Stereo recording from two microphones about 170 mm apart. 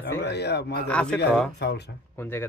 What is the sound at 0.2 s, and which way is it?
Speech, 75° left (ahead or behind).